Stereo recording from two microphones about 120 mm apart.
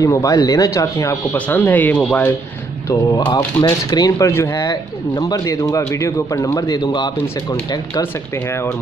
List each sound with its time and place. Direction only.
0.0 s a man's voice: 30° left (ahead or behind)
1.3 s speech: 15° left (ahead or behind)
3.2 s speech: 35° left (ahead or behind)
4.3 s a man's voice: 20° left (ahead or behind); by 7.1 s 35° left (ahead or behind)